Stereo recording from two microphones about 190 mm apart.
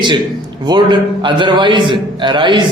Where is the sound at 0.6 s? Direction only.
25° right (ahead or behind).